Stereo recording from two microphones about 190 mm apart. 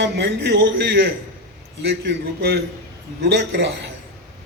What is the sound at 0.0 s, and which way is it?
A man's voice, 65° right (ahead or behind).